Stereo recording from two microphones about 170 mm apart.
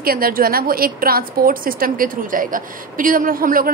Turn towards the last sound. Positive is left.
turn(degrees=-55)  # may be behind; listen again after turning